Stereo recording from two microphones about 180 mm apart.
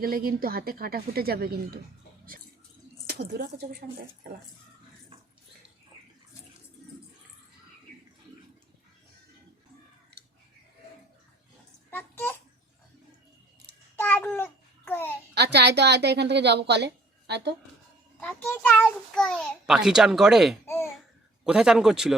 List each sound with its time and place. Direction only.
0.0 s speech: 55° right (ahead or behind)
3.1 s speech: 65° right (ahead or behind)
11.9 s babbling: 10° left (ahead or behind)
13.9 s babbling: 10° left (ahead or behind)
15.4 s a woman's voice: 65° right (ahead or behind)
18.2 s a child's voice: 10° left (ahead or behind)